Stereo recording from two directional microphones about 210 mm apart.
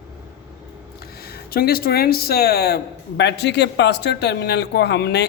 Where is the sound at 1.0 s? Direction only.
45° left (ahead or behind).